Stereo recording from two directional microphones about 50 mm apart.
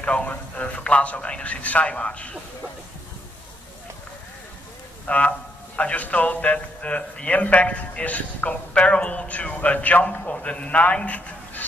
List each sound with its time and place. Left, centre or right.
0.0 s a man's voice: left
5.0 s a man's voice: left